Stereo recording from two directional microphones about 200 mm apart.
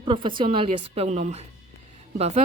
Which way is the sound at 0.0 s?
25° right (ahead or behind).